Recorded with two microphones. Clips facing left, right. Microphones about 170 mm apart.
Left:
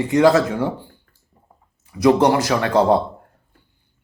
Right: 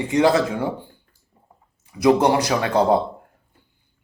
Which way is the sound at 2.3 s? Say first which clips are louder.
Left 1 dB; 25° right (ahead or behind).